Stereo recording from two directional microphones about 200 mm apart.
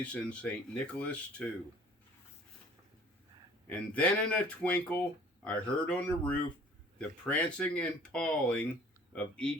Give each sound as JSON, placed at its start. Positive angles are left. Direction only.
{"t": 0.0, "sound": "speech", "side_deg": 5}
{"t": 3.7, "sound": "speech", "side_deg": 5}